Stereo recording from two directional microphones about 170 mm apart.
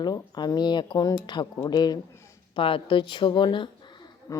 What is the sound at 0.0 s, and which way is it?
Speech, 25° left (ahead or behind).